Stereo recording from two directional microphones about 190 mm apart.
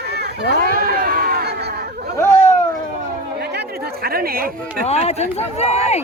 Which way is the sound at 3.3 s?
60° right (ahead or behind).